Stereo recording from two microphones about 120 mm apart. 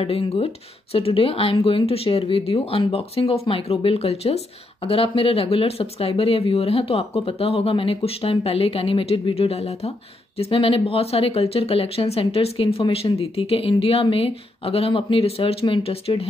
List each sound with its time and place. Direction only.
0.0 s speech: 55° left (ahead or behind)